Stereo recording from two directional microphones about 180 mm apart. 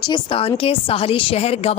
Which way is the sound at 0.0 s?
25° left (ahead or behind).